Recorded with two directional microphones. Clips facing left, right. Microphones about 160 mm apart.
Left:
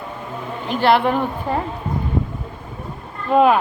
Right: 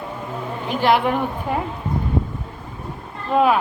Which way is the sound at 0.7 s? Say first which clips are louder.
Left 2 dB; 10° right (ahead or behind).